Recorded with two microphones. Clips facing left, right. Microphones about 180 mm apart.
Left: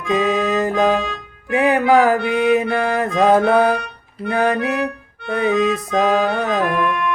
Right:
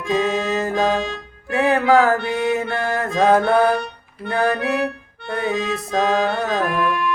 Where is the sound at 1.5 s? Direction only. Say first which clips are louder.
Left 1 dB; 15° left (ahead or behind).